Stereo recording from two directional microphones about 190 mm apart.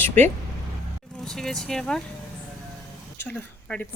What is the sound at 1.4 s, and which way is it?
Speech, centre (ahead or behind).